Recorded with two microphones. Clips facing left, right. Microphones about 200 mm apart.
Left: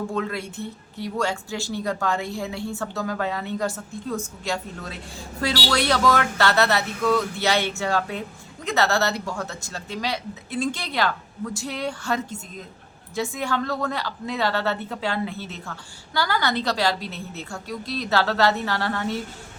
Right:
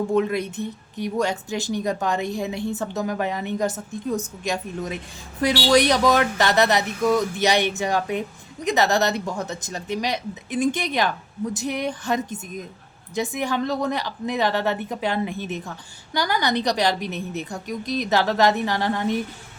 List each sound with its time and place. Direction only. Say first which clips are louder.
0.1 s a woman's voice: right 6 dB; 20° right (ahead or behind)